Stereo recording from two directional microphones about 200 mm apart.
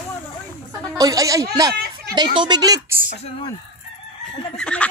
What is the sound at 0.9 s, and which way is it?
Speech, 15° right (ahead or behind).